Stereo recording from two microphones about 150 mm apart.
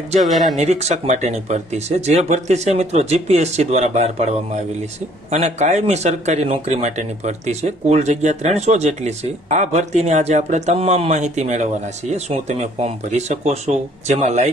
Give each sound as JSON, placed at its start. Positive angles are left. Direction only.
{"t": 0.3, "sound": "speech", "side_deg": 0}
{"t": 0.6, "sound": "speech", "side_deg": -45}